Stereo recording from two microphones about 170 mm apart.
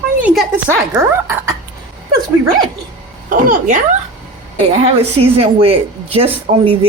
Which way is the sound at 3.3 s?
50° right (ahead or behind).